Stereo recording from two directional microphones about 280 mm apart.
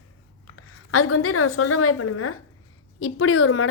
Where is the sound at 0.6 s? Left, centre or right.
Left.